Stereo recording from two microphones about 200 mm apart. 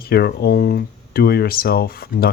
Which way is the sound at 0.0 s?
55° left (ahead or behind).